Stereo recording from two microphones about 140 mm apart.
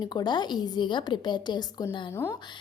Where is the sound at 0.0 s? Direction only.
30° left (ahead or behind).